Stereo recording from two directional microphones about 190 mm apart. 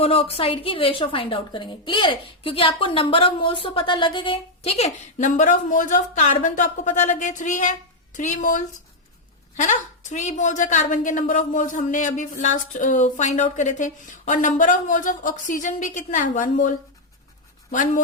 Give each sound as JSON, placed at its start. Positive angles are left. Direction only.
{"t": 0.0, "sound": "a woman's voice", "side_deg": 30}